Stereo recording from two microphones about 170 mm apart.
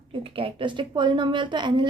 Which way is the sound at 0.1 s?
30° right (ahead or behind).